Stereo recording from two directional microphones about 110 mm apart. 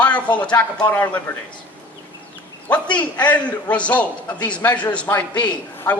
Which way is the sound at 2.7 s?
15° left (ahead or behind).